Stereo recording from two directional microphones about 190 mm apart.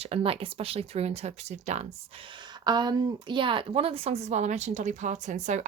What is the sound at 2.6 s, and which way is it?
A woman's voice, 20° right (ahead or behind).